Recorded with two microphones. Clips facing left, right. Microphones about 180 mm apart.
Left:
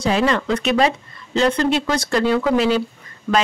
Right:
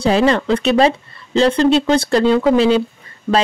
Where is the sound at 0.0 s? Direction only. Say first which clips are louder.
Right 4 dB; 30° right (ahead or behind).